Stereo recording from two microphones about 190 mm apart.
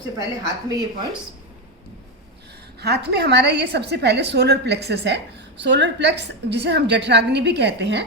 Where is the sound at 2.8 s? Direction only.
60° right (ahead or behind).